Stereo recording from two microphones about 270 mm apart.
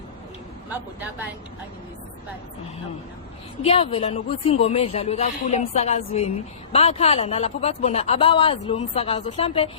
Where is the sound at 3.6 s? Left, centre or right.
Left.